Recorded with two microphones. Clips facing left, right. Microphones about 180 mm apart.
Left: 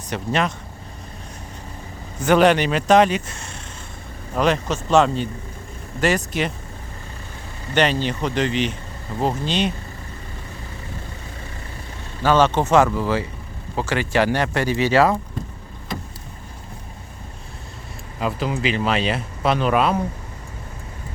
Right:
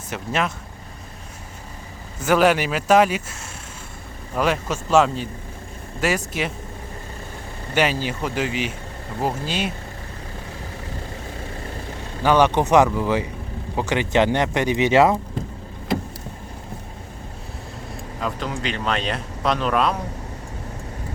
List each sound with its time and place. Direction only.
0.1 s speech: 5° right (ahead or behind)
2.2 s speech: 5° right (ahead or behind)
4.4 s speech: 5° right (ahead or behind)
7.7 s speech: 5° right (ahead or behind)
12.2 s speech: 15° right (ahead or behind)
18.2 s speech: 5° left (ahead or behind)